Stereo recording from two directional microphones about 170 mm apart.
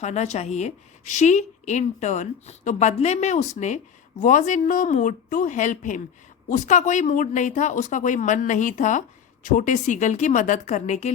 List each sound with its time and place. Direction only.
0.0 s speech: 40° left (ahead or behind)